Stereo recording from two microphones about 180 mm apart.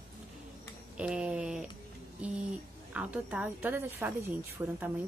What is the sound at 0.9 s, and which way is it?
Speech, 5° right (ahead or behind).